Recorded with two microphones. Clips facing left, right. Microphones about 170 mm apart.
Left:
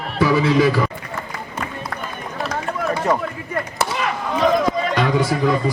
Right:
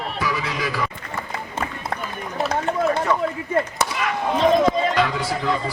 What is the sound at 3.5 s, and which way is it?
Chop, 25° right (ahead or behind).